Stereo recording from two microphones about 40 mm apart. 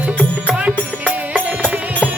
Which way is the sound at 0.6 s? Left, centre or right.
Right.